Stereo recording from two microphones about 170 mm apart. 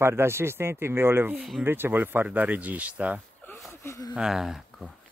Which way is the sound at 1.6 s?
15° right (ahead or behind).